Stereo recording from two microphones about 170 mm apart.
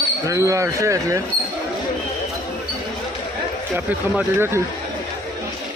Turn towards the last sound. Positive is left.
turn(degrees=-10)  # may be behind; listen again after turning